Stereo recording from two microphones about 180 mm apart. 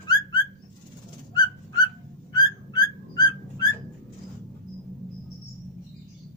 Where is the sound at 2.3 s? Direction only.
20° left (ahead or behind).